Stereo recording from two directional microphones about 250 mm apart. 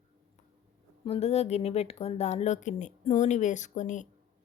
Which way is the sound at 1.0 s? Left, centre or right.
Left.